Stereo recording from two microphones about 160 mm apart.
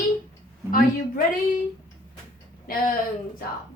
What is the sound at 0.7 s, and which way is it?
Speech, 60° left (ahead or behind).